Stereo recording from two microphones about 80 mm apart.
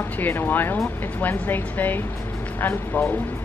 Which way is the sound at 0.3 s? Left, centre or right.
Left.